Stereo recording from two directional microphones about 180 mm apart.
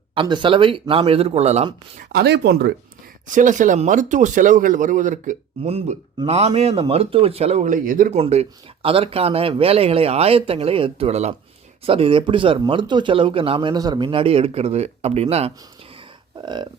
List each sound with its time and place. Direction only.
0.1 s speech: 25° right (ahead or behind)
2.1 s speech: 65° right (ahead or behind)
3.2 s speech: 45° right (ahead or behind)
8.1 s speech: 35° right (ahead or behind)